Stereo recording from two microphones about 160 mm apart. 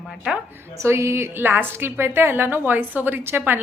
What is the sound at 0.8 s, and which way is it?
A woman's voice, 15° right (ahead or behind).